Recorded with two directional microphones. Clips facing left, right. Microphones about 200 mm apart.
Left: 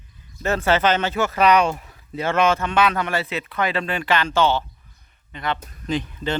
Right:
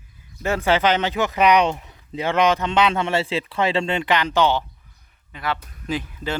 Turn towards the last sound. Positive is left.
turn(degrees=-5)  # may be behind; listen again after turning